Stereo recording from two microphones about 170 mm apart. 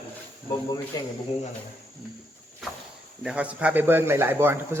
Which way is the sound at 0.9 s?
20° left (ahead or behind).